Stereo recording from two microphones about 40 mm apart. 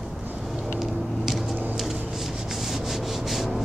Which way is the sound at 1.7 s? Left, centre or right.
Centre.